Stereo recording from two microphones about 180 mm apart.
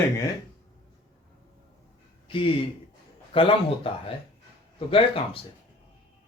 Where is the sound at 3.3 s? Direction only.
30° left (ahead or behind).